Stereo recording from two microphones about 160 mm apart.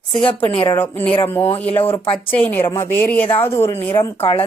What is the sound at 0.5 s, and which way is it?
Speech, 35° left (ahead or behind).